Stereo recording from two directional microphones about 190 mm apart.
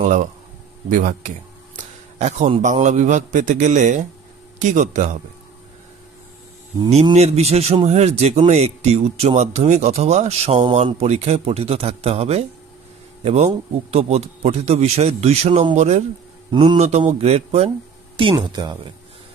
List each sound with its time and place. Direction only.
0.0 s a man's voice: 40° right (ahead or behind)
6.9 s speech: 35° right (ahead or behind)
18.3 s speech: 20° right (ahead or behind)